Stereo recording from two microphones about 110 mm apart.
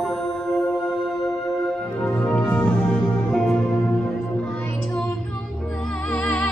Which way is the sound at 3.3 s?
5° left (ahead or behind).